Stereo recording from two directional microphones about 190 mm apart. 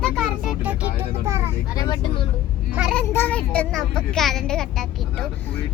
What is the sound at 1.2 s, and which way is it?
Vehicle, 15° right (ahead or behind).